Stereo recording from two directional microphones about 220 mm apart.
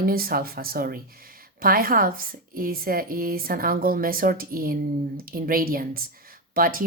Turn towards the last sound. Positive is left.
turn(degrees=-40)  # may be behind; listen again after turning